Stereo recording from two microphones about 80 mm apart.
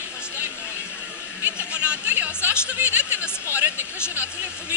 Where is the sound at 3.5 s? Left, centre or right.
Right.